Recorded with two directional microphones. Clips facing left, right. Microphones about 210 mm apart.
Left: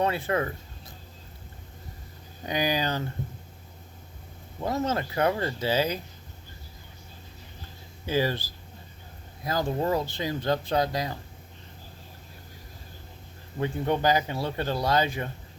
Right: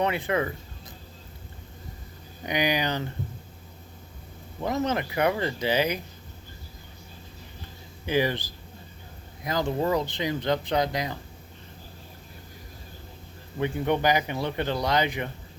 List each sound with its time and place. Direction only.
0.0 s speech: 20° right (ahead or behind)
2.5 s speech: 15° right (ahead or behind)
4.6 s speech: 20° right (ahead or behind)
8.0 s speech: 15° right (ahead or behind)
9.4 s speech: 20° right (ahead or behind)
13.6 s speech: 15° right (ahead or behind)